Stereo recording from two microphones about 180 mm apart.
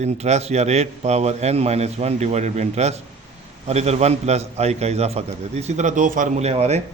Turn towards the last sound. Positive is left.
turn(degrees=-35)  # may be behind; listen again after turning